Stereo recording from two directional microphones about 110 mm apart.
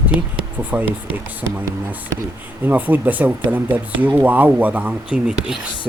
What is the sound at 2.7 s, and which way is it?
Speech, 15° right (ahead or behind).